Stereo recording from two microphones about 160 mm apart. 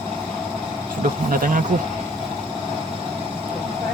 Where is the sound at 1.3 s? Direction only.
55° right (ahead or behind).